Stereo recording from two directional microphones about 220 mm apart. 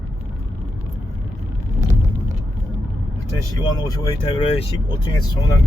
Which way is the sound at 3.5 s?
15° left (ahead or behind).